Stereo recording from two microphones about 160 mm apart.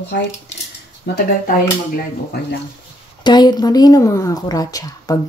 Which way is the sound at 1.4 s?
70° left (ahead or behind).